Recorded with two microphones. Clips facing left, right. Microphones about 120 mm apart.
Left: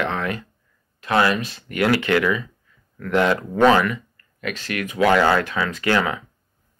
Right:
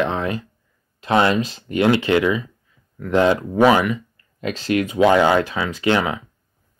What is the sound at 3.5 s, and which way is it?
Speech, 10° right (ahead or behind).